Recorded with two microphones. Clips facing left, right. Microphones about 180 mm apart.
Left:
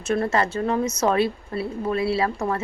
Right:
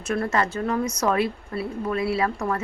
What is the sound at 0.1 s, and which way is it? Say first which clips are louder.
Speech: left 2 dB; 25° left (ahead or behind).